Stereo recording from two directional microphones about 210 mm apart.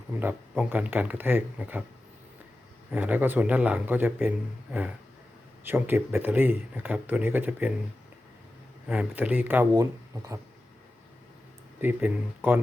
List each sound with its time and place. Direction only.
0.2 s speech: 10° right (ahead or behind)
2.9 s speech: 5° right (ahead or behind)
8.9 s speech: 5° right (ahead or behind)
11.8 s speech: 10° right (ahead or behind)